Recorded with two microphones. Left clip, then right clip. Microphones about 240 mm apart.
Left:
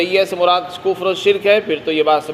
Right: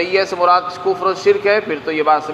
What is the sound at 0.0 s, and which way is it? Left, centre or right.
A man's voice, left.